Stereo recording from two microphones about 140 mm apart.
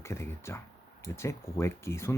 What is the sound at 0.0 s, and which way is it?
Speech, 20° left (ahead or behind).